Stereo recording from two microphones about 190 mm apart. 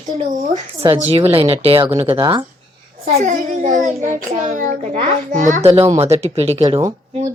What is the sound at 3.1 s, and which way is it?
Speech, 40° right (ahead or behind).